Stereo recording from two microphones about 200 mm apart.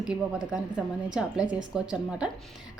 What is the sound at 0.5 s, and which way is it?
A woman's voice, 5° right (ahead or behind).